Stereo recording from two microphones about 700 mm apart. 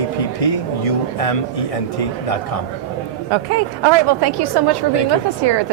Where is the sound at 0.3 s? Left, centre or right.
Left.